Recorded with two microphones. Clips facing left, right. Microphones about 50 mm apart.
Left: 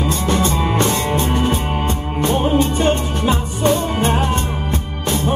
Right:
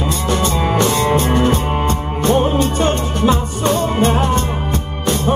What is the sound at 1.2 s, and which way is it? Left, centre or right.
Music, right.